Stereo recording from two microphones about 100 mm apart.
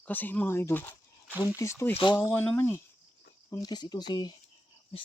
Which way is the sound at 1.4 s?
35° left (ahead or behind).